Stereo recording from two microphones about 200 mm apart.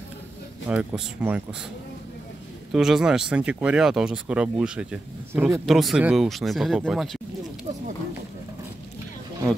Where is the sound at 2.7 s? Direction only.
Centre (ahead or behind).